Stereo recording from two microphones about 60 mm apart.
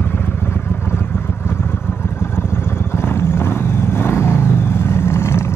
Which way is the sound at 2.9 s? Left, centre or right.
Left.